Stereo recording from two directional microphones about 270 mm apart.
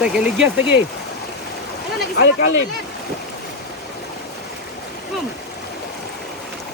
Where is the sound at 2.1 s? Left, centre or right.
Left.